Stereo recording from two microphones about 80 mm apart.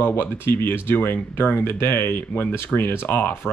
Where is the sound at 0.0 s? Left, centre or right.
Left.